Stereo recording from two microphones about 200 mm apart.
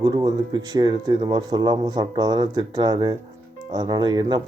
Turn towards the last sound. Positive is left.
turn(degrees=-20)  # may be behind; listen again after turning